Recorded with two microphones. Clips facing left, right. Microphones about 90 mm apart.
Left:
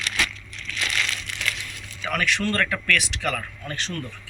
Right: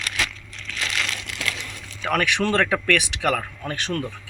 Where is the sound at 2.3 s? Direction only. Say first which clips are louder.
Right 4 dB; 70° right (ahead or behind).